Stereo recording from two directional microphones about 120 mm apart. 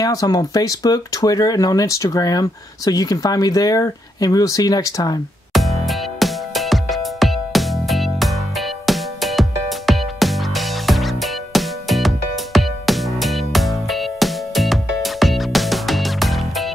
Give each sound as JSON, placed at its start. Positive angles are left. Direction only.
{"t": 0.0, "sound": "speech", "side_deg": 30}
{"t": 5.5, "sound": "music", "side_deg": 0}